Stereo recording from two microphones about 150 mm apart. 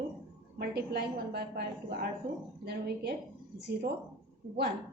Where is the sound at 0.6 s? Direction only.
90° right.